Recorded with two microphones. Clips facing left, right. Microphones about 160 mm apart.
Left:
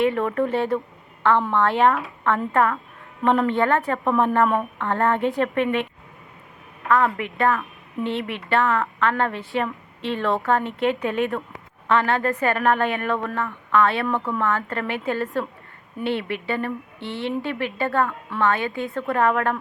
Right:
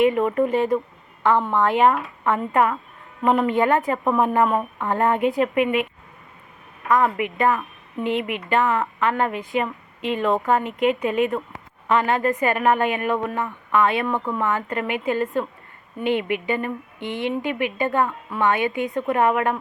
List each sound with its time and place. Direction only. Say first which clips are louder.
0.0 s a woman's voice: right 3 dB; 10° right (ahead or behind)
2.2 s a woman's voice: right 1 dB; 15° right (ahead or behind)
7.0 s a woman's voice: right 1 dB; 5° right (ahead or behind)